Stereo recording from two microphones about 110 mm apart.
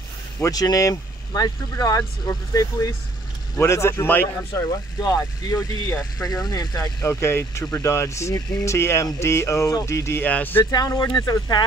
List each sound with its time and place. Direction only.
0.4 s speech: 35° left (ahead or behind)
5.0 s speech: 35° left (ahead or behind); by 10.6 s 15° left (ahead or behind)
10.6 s speech: 35° left (ahead or behind)